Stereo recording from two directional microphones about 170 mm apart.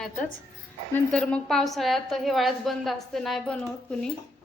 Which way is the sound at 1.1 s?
5° left (ahead or behind).